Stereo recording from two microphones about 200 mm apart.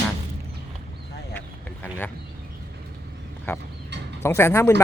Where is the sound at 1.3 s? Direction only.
10° left (ahead or behind).